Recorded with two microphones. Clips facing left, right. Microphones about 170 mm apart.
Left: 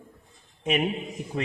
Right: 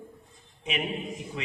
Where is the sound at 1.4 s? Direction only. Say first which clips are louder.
Left 8 dB; 50° left (ahead or behind).